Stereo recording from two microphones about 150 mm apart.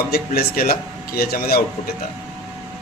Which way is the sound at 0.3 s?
85° left.